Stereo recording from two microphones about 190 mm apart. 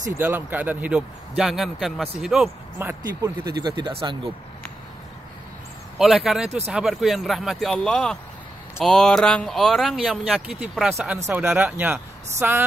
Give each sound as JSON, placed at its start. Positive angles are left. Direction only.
{"t": 0.2, "sound": "speech", "side_deg": -10}
{"t": 3.4, "sound": "speech", "side_deg": -20}
{"t": 5.9, "sound": "speech", "side_deg": 0}